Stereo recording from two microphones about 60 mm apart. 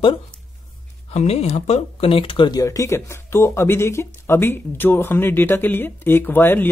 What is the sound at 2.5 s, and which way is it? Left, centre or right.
Speech, left.